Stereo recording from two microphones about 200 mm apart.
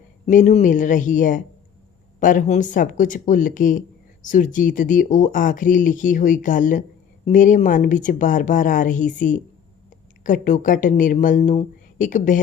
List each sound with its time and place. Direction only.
0.3 s speech: 35° left (ahead or behind)